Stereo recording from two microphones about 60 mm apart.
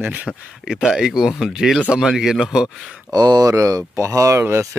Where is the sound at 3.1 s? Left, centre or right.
Right.